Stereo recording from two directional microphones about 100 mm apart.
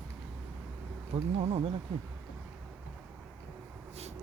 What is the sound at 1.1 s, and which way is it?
Speech, 90° right.